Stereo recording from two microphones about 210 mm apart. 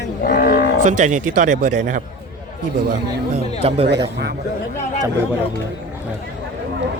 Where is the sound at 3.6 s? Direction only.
30° right (ahead or behind).